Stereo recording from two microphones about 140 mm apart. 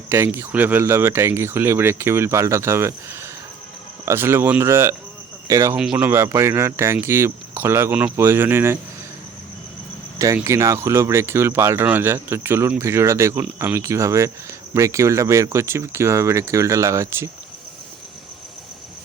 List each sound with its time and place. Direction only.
0.1 s speech: 15° right (ahead or behind)
5.7 s speech: 5° right (ahead or behind)
6.1 s speech: 20° right (ahead or behind)
10.3 s speech: 20° right (ahead or behind)